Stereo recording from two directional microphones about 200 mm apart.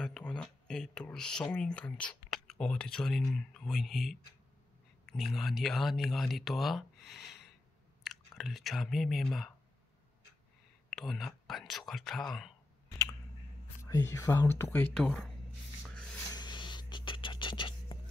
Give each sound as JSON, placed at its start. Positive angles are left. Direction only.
{"t": 0.0, "sound": "speech", "side_deg": 5}
{"t": 10.9, "sound": "speech", "side_deg": 0}
{"t": 13.8, "sound": "speech", "side_deg": 15}
{"t": 16.3, "sound": "scratch", "side_deg": 20}